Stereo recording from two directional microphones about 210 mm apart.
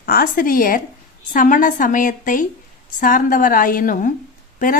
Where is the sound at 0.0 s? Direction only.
45° left (ahead or behind).